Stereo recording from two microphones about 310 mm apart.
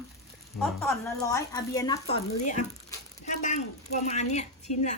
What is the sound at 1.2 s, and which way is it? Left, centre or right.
A woman's voice, centre.